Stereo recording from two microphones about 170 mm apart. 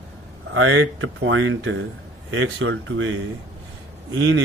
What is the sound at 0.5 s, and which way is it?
Speech, 90° right.